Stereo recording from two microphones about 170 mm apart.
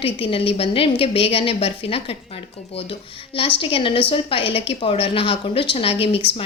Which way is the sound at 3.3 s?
30° left (ahead or behind).